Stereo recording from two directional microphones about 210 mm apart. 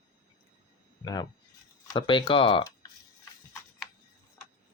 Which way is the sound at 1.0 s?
20° left (ahead or behind).